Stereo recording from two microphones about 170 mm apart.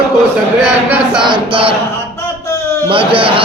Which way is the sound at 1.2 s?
30° right (ahead or behind).